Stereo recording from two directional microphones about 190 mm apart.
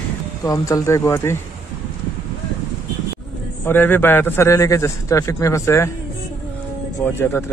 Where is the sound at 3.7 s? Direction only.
10° left (ahead or behind).